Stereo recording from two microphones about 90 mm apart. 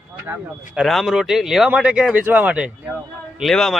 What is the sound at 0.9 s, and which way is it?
Speech, centre (ahead or behind).